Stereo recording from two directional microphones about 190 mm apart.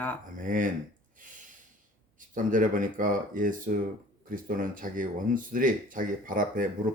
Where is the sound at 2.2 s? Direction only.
45° right (ahead or behind).